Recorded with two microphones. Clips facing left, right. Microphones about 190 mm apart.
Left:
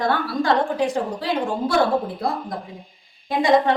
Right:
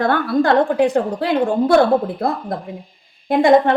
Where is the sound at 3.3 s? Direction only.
55° right (ahead or behind).